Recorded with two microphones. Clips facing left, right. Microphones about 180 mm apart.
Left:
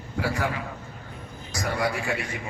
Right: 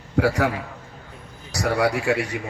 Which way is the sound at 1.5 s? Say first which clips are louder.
Right 6 dB; 75° right (ahead or behind).